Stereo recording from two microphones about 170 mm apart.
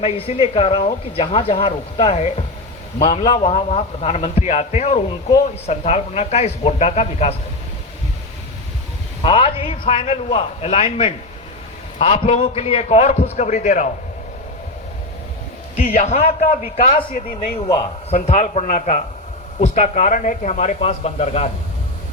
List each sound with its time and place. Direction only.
0.0 s a man's voice: 35° left (ahead or behind)
9.2 s a man's voice: 30° left (ahead or behind)
16.0 s a man's voice: 40° left (ahead or behind); by 17.6 s 60° left (ahead or behind)
17.6 s a man's voice: 30° left (ahead or behind)